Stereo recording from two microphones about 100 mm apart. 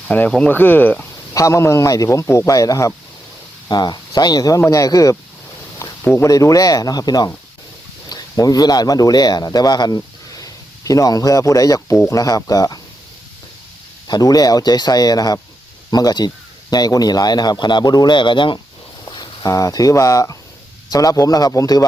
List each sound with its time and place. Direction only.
0.1 s speech: 15° left (ahead or behind)
1.3 s a man's voice: 30° left (ahead or behind)
2.2 s a man's voice: 20° left (ahead or behind)
2.5 s speech: 35° left (ahead or behind)
3.7 s speech: 45° left (ahead or behind)
5.8 s a sound: 30° left (ahead or behind)
6.2 s speech: 35° left (ahead or behind)
14.1 s speech: 40° left (ahead or behind)
19.0 s a sound: 45° left (ahead or behind)
19.5 s speech: 35° left (ahead or behind)